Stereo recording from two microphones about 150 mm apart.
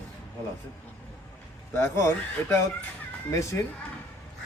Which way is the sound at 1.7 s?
15° left (ahead or behind).